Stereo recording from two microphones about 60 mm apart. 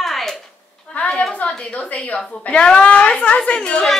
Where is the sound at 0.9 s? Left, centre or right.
Centre.